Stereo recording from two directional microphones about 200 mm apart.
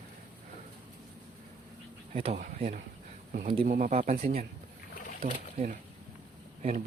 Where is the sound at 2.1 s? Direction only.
30° right (ahead or behind).